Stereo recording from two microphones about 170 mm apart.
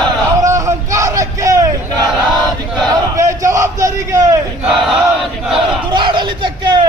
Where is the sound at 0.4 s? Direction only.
20° right (ahead or behind).